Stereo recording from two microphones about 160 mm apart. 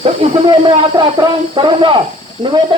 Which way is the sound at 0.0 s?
35° right (ahead or behind).